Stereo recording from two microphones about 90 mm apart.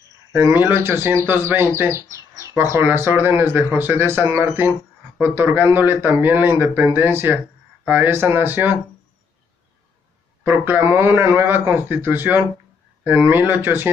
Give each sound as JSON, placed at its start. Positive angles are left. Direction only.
{"t": 0.3, "sound": "speech", "side_deg": -20}
{"t": 1.8, "sound": "bird", "side_deg": -30}
{"t": 2.5, "sound": "speech", "side_deg": -25}
{"t": 10.6, "sound": "speech", "side_deg": -25}